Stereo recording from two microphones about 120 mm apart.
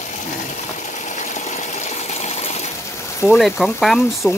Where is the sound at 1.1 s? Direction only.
85° left; by 2.6 s 65° left (ahead or behind).